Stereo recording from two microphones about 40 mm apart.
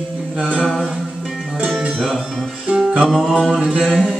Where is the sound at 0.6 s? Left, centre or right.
Centre.